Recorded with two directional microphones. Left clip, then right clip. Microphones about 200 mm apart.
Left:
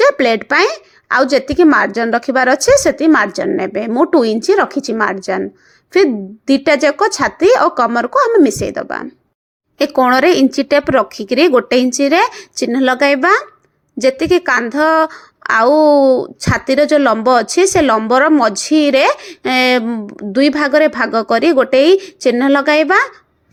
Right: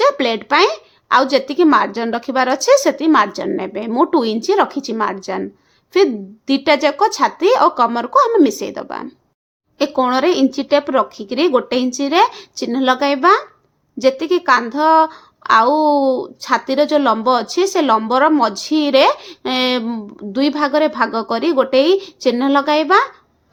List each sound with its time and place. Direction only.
0.0 s speech: 25° left (ahead or behind)
6.5 s speech: 20° left (ahead or behind)